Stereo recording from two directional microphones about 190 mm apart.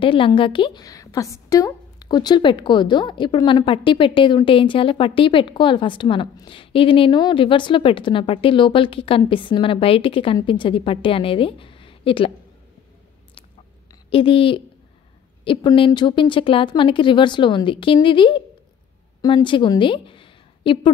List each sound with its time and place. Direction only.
0.0 s a woman's voice: 25° left (ahead or behind)
14.1 s a woman's voice: 30° left (ahead or behind)